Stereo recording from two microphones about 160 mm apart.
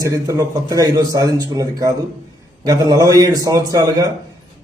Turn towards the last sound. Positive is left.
turn(degrees=-20)  # may be behind; listen again after turning